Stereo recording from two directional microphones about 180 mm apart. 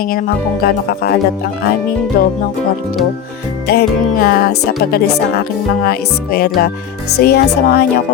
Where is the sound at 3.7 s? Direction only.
60° left (ahead or behind).